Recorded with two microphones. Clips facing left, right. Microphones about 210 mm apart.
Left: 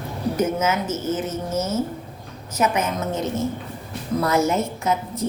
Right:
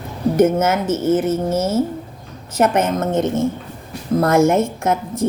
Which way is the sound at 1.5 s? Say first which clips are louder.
Right 6 dB; 30° right (ahead or behind).